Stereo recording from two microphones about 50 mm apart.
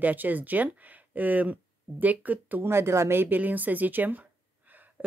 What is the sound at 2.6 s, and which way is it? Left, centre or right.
Speech, right.